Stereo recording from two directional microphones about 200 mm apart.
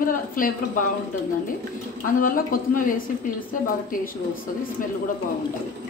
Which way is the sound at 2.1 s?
45° left (ahead or behind).